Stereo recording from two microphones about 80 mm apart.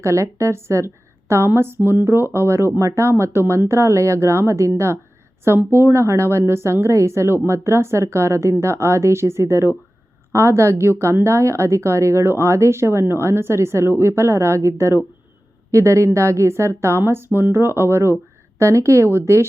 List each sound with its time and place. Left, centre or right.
0.0 s a woman's voice: right